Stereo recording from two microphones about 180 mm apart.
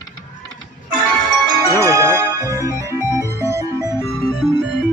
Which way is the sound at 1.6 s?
15° right (ahead or behind).